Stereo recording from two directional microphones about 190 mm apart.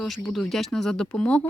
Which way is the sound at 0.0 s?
Centre (ahead or behind).